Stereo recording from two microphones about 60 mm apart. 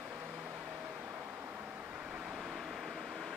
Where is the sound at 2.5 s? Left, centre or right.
Centre.